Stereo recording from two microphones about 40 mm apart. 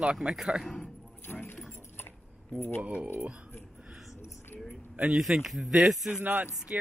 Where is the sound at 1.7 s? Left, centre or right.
Left.